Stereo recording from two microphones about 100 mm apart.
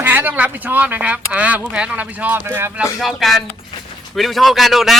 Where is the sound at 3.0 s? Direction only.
Centre (ahead or behind).